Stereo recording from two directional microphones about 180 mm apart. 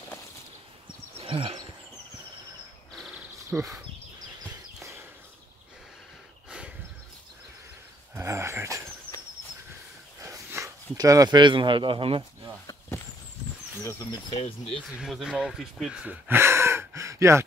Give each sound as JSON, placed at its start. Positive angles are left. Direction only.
{"t": 1.2, "sound": "a sound", "side_deg": -30}
{"t": 3.5, "sound": "speech", "side_deg": -10}
{"t": 8.1, "sound": "dog", "side_deg": -15}
{"t": 10.2, "sound": "speech", "side_deg": -15}
{"t": 14.3, "sound": "speech", "side_deg": 35}
{"t": 14.8, "sound": "speech", "side_deg": -5}